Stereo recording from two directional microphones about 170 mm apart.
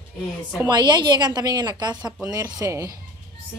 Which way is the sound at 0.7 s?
25° right (ahead or behind).